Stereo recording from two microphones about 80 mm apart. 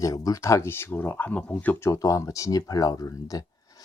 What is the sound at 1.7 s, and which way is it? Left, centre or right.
Speech, left.